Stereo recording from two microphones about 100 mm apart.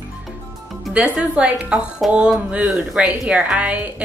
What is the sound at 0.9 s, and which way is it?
A woman's voice, 10° right (ahead or behind).